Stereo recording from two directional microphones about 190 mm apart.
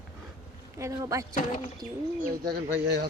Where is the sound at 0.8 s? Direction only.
15° right (ahead or behind).